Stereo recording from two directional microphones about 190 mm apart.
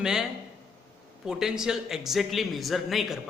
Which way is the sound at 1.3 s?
5° right (ahead or behind).